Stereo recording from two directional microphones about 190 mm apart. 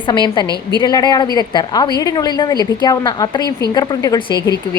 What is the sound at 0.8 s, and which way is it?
A woman's voice, 20° left (ahead or behind).